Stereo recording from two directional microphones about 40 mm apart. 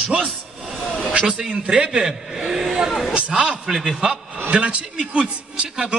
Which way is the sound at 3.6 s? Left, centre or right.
Centre.